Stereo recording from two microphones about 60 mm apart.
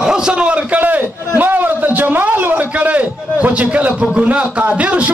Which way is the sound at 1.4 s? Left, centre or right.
Right.